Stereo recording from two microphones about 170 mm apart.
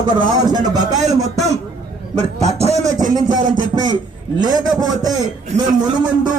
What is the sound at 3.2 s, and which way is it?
A man's voice, 25° right (ahead or behind).